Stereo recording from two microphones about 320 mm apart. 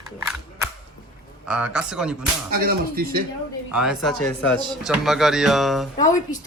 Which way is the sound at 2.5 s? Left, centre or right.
Right.